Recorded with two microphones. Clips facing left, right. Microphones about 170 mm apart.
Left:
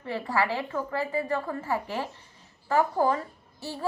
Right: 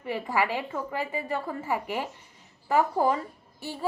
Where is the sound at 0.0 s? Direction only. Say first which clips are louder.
Even; 15° right (ahead or behind).